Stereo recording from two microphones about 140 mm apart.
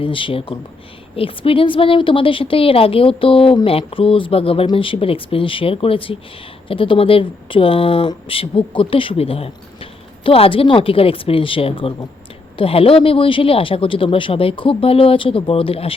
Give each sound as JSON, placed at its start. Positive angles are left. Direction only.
{"t": 0.0, "sound": "a woman's voice", "side_deg": 40}